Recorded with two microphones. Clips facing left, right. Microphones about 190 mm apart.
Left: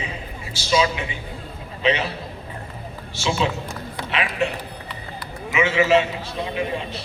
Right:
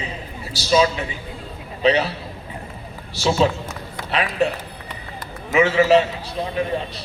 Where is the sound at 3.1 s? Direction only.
35° right (ahead or behind).